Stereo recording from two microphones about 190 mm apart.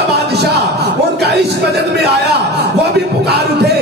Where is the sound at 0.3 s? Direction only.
60° right (ahead or behind).